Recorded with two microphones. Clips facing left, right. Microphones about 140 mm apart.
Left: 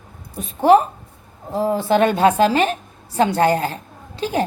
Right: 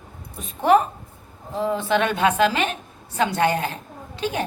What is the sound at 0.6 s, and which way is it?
A woman's voice, 30° left (ahead or behind).